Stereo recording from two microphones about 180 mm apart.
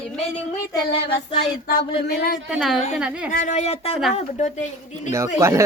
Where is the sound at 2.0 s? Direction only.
60° left (ahead or behind).